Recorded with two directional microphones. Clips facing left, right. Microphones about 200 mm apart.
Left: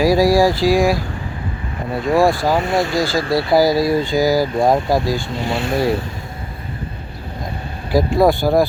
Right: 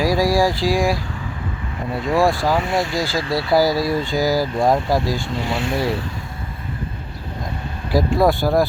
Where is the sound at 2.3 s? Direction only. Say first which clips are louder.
Left 2 dB; centre (ahead or behind).